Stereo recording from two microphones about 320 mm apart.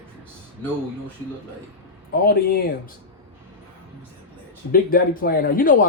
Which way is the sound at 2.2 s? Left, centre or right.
Left.